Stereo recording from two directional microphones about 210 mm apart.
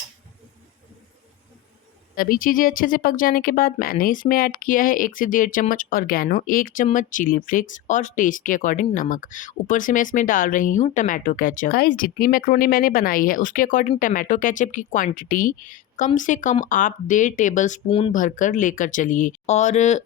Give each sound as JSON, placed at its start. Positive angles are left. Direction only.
{"t": 2.1, "sound": "speech", "side_deg": 45}